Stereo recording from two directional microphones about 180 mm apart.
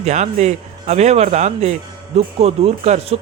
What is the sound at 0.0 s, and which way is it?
Speech, 40° right (ahead or behind).